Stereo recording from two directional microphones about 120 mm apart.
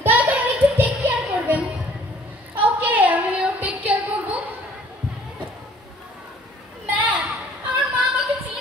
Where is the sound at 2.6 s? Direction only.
15° right (ahead or behind).